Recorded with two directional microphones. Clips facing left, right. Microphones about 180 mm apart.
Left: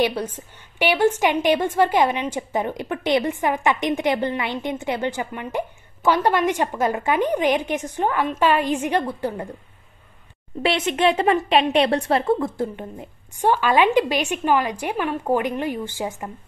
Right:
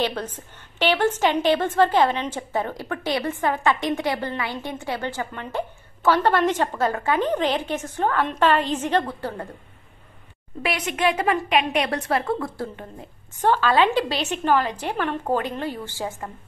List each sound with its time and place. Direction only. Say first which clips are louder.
0.0 s a woman's voice: left 4 dB; 10° left (ahead or behind)
10.6 s a woman's voice: left 4 dB; 25° left (ahead or behind)